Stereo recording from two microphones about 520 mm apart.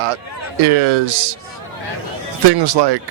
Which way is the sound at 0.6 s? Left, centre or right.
Right.